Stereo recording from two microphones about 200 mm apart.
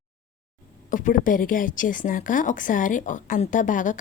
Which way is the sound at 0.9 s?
40° left (ahead or behind).